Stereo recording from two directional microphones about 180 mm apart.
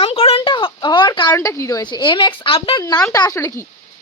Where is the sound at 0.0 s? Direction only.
35° left (ahead or behind).